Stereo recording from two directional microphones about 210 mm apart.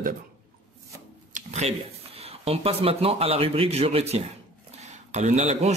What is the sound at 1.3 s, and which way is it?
Speech, 30° right (ahead or behind).